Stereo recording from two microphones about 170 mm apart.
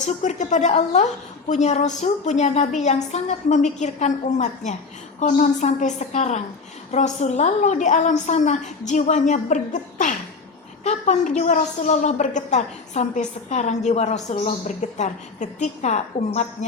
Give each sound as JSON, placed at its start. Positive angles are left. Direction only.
{"t": 0.0, "sound": "a woman's voice", "side_deg": 45}
{"t": 10.8, "sound": "a woman's voice", "side_deg": 45}